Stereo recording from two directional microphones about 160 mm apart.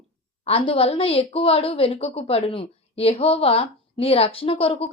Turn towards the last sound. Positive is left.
turn(degrees=35)  # may be behind; listen again after turning